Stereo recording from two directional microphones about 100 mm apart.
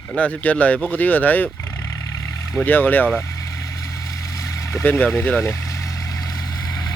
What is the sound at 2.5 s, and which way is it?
Speech, 20° left (ahead or behind).